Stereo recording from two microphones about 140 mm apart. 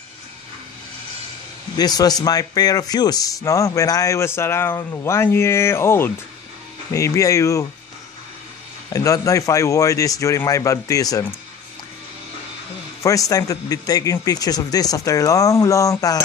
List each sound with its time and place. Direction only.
1.8 s a man's voice: 30° left (ahead or behind)
8.9 s a man's voice: 25° left (ahead or behind)
13.0 s a man's voice: 25° left (ahead or behind)